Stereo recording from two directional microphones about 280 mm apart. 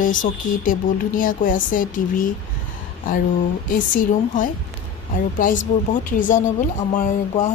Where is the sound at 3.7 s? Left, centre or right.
Left.